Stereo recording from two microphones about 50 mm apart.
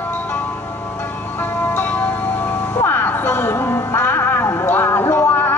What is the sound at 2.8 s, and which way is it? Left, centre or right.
Music, left.